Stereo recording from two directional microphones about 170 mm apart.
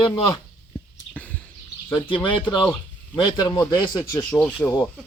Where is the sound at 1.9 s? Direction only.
30° left (ahead or behind).